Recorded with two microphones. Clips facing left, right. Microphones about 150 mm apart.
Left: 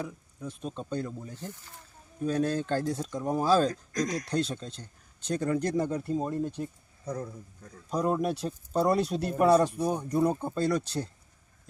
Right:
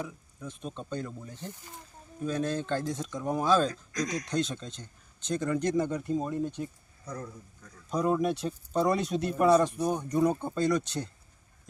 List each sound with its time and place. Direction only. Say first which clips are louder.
0.4 s speech: left 2 dB; 5° left (ahead or behind)
2.2 s speech: left 3 dB; 40° left (ahead or behind)
3.1 s speech: left 1 dB; 5° left (ahead or behind)
3.4 s speech: left 1 dB; 35° left (ahead or behind)
4.3 s speech: left 1 dB; 35° left (ahead or behind)
6.1 s speech: even; centre (ahead or behind)
7.9 s speech: right 1 dB; 5° left (ahead or behind)
10.5 s speech: right 1 dB; 30° left (ahead or behind)